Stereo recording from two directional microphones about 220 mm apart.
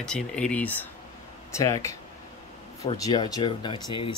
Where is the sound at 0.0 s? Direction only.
5° left (ahead or behind).